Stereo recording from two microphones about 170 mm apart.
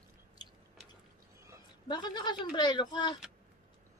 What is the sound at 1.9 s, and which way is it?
Speech, 25° left (ahead or behind).